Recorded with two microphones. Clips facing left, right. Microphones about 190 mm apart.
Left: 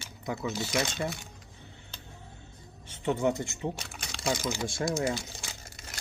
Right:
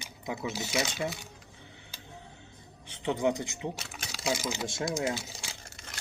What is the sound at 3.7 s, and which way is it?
Typing, 5° right (ahead or behind).